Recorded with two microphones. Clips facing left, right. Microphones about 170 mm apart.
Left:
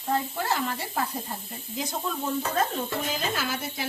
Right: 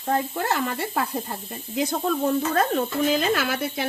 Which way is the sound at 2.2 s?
70° right (ahead or behind).